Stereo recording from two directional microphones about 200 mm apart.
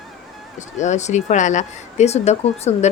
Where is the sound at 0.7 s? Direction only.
35° left (ahead or behind).